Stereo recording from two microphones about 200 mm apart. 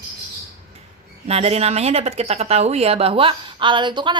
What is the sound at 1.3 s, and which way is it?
Speech, 30° right (ahead or behind).